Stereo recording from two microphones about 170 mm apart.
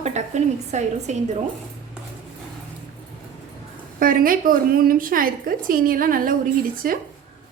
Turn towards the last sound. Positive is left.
turn(degrees=-55)  # may be behind; listen again after turning